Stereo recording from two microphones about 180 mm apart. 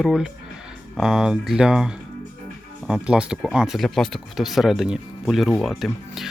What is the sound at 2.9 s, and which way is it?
Speech, 5° right (ahead or behind).